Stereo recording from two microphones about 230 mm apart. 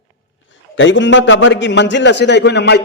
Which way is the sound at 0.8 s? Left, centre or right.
Left.